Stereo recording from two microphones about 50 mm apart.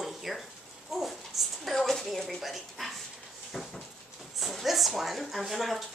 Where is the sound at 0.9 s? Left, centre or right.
Centre.